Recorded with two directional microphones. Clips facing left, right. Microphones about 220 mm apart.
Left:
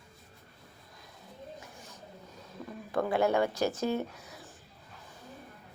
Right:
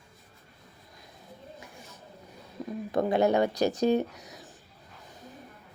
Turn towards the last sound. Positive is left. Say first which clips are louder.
# right 5 dB
turn(degrees=-20)  # may be behind; listen again after turning